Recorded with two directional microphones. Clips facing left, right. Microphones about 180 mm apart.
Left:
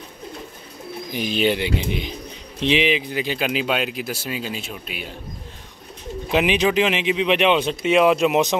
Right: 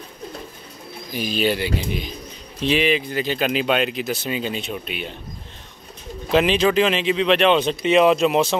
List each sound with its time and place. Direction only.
1.1 s speech: 20° left (ahead or behind)
6.3 s speech: 15° left (ahead or behind)